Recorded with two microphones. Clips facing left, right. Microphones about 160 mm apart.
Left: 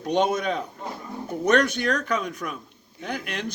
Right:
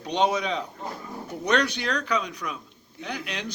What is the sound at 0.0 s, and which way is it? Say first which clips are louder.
A man's voice: left 2 dB; 50° left (ahead or behind).